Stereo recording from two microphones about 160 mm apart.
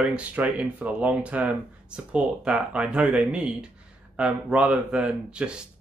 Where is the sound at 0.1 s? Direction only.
10° right (ahead or behind).